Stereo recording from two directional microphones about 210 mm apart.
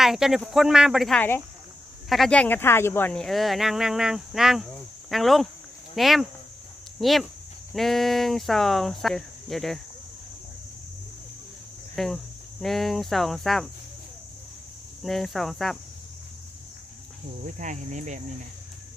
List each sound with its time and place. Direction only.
0.0 s speech: centre (ahead or behind)
11.9 s speech: centre (ahead or behind)
15.0 s speech: centre (ahead or behind)
17.4 s speech: 35° right (ahead or behind)